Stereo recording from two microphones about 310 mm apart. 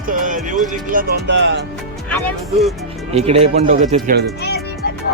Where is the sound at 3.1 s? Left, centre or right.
Centre.